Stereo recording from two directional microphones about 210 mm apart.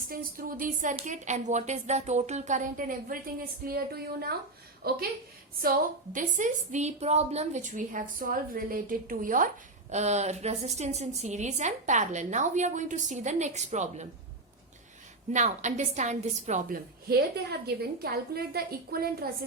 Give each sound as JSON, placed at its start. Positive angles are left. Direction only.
{"t": 0.1, "sound": "a woman's voice", "side_deg": -40}
{"t": 6.1, "sound": "a woman's voice", "side_deg": -35}
{"t": 15.3, "sound": "a woman's voice", "side_deg": -35}